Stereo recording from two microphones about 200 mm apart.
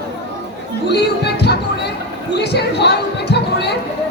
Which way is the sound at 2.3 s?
55° left (ahead or behind).